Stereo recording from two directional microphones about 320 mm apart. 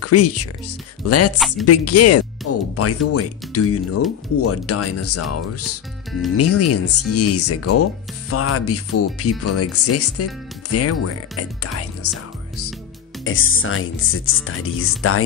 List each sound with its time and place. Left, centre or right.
0.0 s speech: left
2.4 s music: left
3.1 s speech: left